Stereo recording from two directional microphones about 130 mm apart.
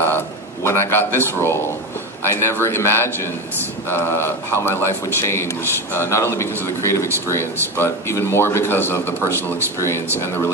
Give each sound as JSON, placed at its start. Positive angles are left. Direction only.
{"t": 0.7, "sound": "a man's voice", "side_deg": 20}